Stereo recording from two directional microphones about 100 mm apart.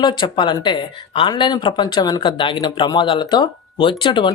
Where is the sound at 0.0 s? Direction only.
50° left (ahead or behind).